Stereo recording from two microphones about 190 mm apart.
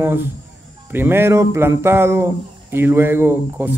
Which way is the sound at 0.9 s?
10° right (ahead or behind).